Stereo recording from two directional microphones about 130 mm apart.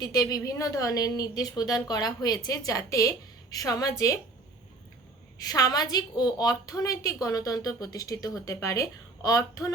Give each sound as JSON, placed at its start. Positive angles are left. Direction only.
{"t": 0.0, "sound": "a woman's voice", "side_deg": 30}
{"t": 5.5, "sound": "a woman's voice", "side_deg": 30}